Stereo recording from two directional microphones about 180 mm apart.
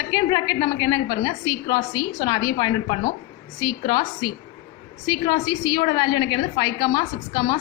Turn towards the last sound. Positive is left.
turn(degrees=20)  # may be behind; listen again after turning